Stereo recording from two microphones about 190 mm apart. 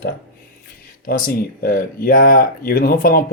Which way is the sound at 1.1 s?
50° left (ahead or behind).